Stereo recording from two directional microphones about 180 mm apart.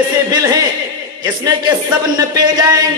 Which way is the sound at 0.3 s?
20° right (ahead or behind).